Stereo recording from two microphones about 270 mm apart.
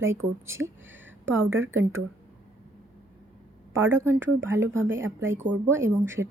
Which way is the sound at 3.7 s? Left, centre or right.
Centre.